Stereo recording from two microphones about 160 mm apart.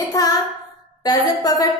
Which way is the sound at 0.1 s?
20° left (ahead or behind).